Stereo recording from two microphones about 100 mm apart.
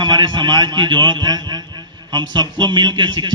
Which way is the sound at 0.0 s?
45° right (ahead or behind).